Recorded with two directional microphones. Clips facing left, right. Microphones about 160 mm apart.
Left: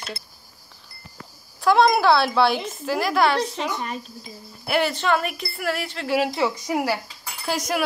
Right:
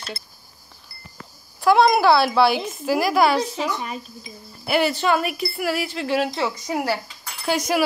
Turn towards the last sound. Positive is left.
turn(degrees=0)  # may be behind; listen again after turning